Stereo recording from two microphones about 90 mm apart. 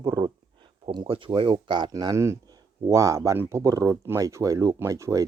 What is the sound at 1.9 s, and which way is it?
Speech, 40° right (ahead or behind).